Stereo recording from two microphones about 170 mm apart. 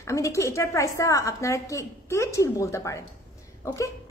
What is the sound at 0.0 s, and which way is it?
A woman's voice, 20° left (ahead or behind).